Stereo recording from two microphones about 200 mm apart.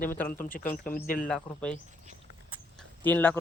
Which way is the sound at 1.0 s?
45° left (ahead or behind).